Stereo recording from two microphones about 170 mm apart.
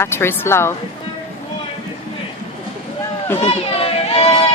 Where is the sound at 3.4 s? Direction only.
35° left (ahead or behind).